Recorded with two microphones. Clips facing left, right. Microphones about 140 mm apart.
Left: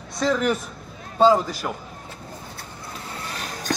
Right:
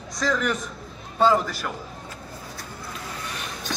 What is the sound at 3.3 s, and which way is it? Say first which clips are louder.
Vehicle: left 2 dB; 40° left (ahead or behind).